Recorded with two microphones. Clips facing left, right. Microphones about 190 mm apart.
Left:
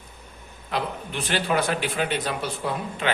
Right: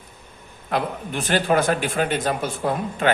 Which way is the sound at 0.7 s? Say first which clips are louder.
Right 4 dB; 45° right (ahead or behind).